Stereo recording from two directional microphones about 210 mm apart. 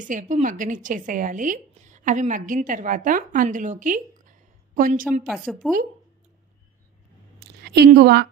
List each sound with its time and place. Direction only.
0.0 s a woman's voice: 35° right (ahead or behind)
5.2 s a woman's voice: centre (ahead or behind)
7.3 s a sound: 50° right (ahead or behind)